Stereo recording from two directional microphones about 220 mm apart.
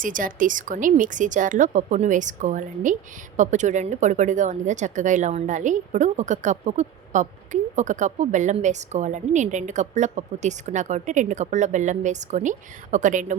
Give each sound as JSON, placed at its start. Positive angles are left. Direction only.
{"t": 0.0, "sound": "speech", "side_deg": -40}